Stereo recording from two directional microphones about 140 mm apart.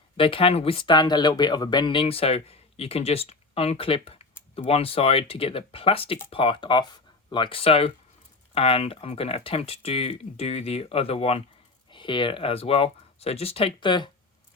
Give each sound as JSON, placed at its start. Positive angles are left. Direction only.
{"t": 0.2, "sound": "speech", "side_deg": 40}
{"t": 11.9, "sound": "speech", "side_deg": 35}